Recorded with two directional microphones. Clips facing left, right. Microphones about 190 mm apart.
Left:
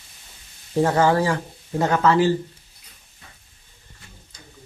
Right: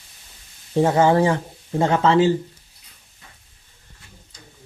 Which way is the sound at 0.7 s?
20° right (ahead or behind).